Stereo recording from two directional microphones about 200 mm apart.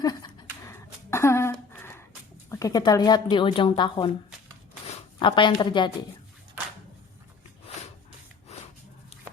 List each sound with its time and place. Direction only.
0.0 s a sound: 20° left (ahead or behind)
2.5 s speech: 15° left (ahead or behind)
5.2 s speech: 25° left (ahead or behind)